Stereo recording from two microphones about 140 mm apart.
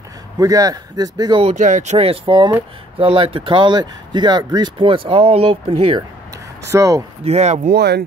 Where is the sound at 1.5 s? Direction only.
60° right (ahead or behind); by 6.0 s 40° right (ahead or behind).